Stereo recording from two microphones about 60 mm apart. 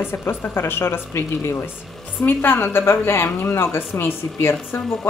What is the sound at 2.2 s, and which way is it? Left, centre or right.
Speech, left.